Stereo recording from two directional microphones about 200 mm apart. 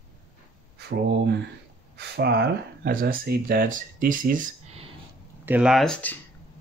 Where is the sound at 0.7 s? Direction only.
55° right (ahead or behind).